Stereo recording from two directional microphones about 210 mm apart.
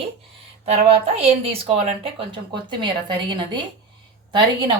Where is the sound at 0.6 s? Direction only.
30° right (ahead or behind).